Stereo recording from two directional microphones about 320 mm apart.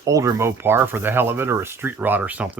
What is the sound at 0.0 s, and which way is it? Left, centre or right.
Speech, centre.